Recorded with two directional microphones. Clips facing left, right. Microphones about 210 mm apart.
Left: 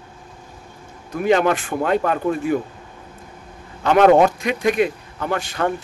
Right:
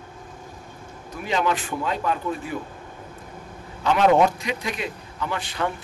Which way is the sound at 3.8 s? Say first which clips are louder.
Left 5 dB; 55° left (ahead or behind).